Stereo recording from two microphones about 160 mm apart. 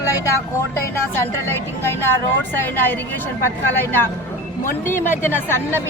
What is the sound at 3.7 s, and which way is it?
Speech, 10° left (ahead or behind).